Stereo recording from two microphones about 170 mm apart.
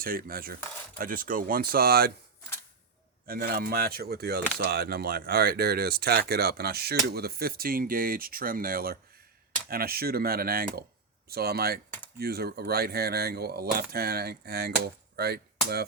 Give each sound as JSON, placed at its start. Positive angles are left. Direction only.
{"t": 0.0, "sound": "speech", "side_deg": -60}
{"t": 3.2, "sound": "speech", "side_deg": -60}
{"t": 12.2, "sound": "a sound", "side_deg": -65}